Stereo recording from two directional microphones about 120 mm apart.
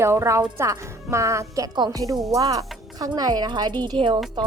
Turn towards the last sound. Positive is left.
turn(degrees=-45)  # may be behind; listen again after turning